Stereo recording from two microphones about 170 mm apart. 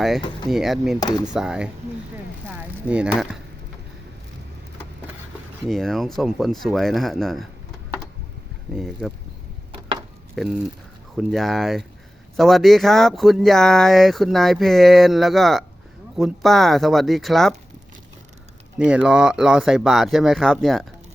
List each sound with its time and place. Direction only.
0.5 s speech: centre (ahead or behind)
0.9 s speech: 25° left (ahead or behind)
1.2 s speech: 5° right (ahead or behind)
2.5 s a sound: 5° right (ahead or behind)
5.6 s speech: centre (ahead or behind)
8.7 s speech: centre (ahead or behind)
10.3 s speech: centre (ahead or behind)
18.8 s speech: 5° right (ahead or behind)